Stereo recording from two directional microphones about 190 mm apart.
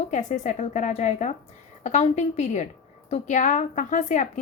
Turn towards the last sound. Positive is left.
turn(degrees=40)  # may be behind; listen again after turning